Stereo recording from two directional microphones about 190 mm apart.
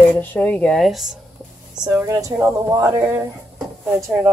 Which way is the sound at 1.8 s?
15° right (ahead or behind).